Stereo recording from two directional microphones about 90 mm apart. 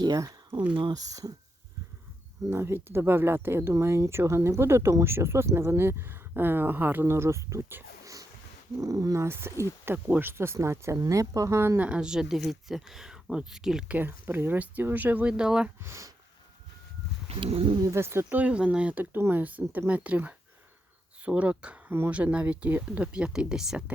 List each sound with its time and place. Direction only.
0.0 s speech: 40° right (ahead or behind)
2.5 s speech: 25° right (ahead or behind)
8.0 s a sound: 40° right (ahead or behind)
8.8 s speech: 40° right (ahead or behind)
9.2 s speech: 30° right (ahead or behind)
10.9 s speech: 40° right (ahead or behind)
11.8 s speech: 10° right (ahead or behind)
13.9 s speech: 20° right (ahead or behind)
15.8 s speech: 35° right (ahead or behind)
17.4 s speech: 90° right
17.9 s speech: 30° right (ahead or behind)
18.3 s speech: 15° right (ahead or behind)